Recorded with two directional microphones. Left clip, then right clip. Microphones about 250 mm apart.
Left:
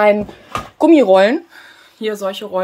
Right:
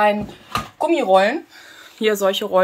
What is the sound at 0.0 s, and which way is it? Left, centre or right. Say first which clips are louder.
Speech: left 5 dB; left.